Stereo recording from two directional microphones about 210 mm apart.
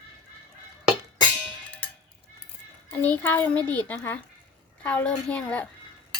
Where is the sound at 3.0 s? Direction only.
10° left (ahead or behind).